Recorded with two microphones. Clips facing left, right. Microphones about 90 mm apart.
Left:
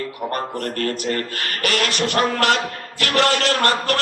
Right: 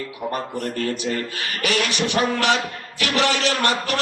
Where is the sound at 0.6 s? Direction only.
55° left (ahead or behind).